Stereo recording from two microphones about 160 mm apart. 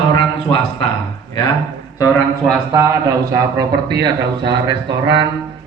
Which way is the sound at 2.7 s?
20° right (ahead or behind).